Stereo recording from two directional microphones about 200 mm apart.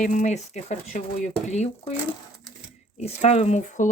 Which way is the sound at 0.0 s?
35° left (ahead or behind).